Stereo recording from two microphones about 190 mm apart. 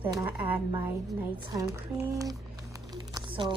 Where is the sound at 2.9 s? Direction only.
25° right (ahead or behind).